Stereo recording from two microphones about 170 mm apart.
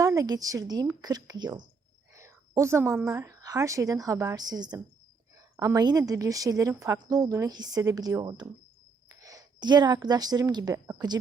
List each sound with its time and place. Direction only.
0.0 s a woman's voice: 20° right (ahead or behind)
2.1 s a sound: 15° right (ahead or behind)
3.1 s a woman's voice: 15° right (ahead or behind)